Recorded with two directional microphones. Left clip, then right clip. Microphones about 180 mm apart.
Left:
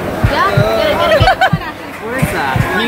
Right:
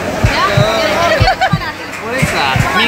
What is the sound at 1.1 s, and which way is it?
Music, 45° left (ahead or behind).